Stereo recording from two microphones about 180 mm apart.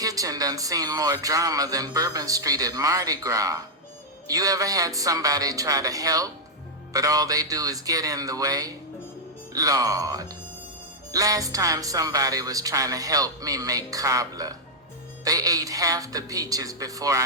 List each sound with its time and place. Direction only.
0.0 s speech: 20° right (ahead or behind)